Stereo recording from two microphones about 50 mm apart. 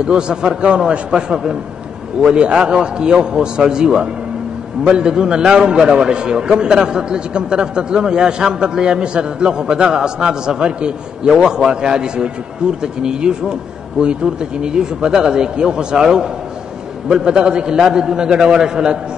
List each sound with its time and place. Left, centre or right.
0.0 s a man's voice: centre